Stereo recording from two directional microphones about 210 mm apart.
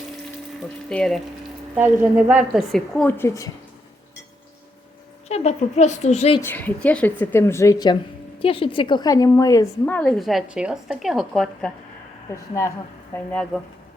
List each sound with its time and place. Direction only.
0.9 s a woman's voice: 5° left (ahead or behind)
1.7 s a woman's voice: 10° right (ahead or behind); by 3.5 s 15° left (ahead or behind)
5.3 s a woman's voice: 30° left (ahead or behind)
6.4 s a woman's voice: 10° left (ahead or behind)
12.3 s a woman's voice: 15° left (ahead or behind)